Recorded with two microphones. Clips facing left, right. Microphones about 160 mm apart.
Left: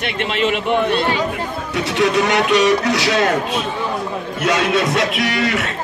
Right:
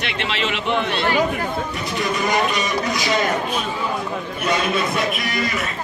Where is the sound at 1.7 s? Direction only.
75° left (ahead or behind).